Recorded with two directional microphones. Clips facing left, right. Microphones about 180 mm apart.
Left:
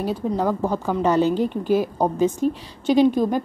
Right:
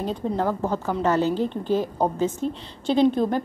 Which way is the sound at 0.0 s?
10° left (ahead or behind).